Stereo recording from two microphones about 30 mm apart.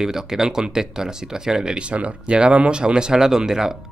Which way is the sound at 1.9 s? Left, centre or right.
Right.